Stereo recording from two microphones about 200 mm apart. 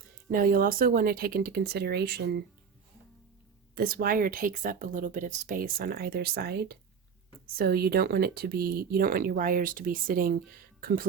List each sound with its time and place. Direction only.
0.3 s speech: 45° right (ahead or behind)
3.8 s speech: 45° right (ahead or behind)